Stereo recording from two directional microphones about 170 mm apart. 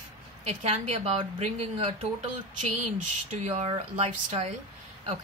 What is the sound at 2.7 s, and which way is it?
Speech, 45° right (ahead or behind).